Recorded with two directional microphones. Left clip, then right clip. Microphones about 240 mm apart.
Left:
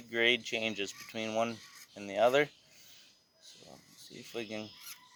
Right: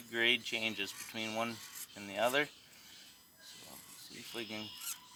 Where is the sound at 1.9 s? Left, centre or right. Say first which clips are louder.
Left 6 dB; left.